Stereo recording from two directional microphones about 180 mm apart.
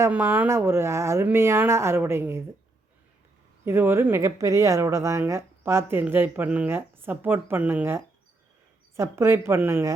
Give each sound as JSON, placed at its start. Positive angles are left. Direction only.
{"t": 0.0, "sound": "speech", "side_deg": -10}
{"t": 3.7, "sound": "speech", "side_deg": -15}